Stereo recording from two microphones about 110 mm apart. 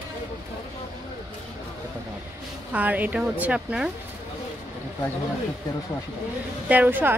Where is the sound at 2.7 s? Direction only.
15° right (ahead or behind).